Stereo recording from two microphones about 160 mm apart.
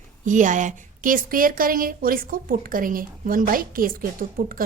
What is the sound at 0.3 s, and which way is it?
A woman's voice, 50° right (ahead or behind).